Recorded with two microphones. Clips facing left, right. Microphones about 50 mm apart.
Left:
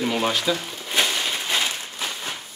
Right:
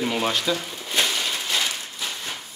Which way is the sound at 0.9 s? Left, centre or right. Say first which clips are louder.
Left 1 dB; centre.